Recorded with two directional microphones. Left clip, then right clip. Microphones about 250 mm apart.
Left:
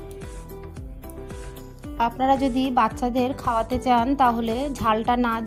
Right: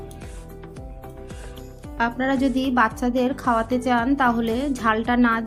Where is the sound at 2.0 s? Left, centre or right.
Left.